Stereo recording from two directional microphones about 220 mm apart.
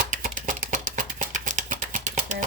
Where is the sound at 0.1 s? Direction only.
35° right (ahead or behind).